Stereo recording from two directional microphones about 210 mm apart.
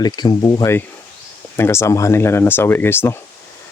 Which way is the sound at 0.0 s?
20° left (ahead or behind).